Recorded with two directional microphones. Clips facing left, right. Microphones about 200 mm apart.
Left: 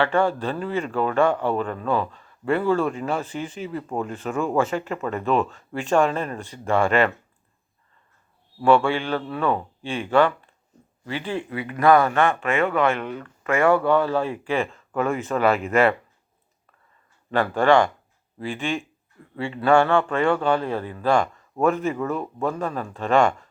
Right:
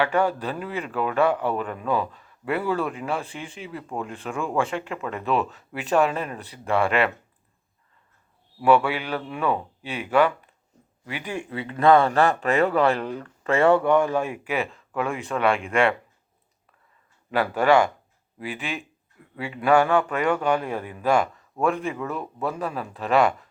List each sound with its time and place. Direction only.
0.0 s speech: 10° right (ahead or behind)
8.6 s a man's voice: 5° right (ahead or behind)
11.4 s speech: 25° right (ahead or behind); by 16.0 s 5° left (ahead or behind)
17.3 s a man's voice: 10° right (ahead or behind)
21.6 s speech: centre (ahead or behind)